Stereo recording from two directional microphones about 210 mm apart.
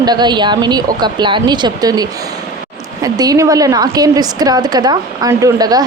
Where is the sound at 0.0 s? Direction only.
20° right (ahead or behind).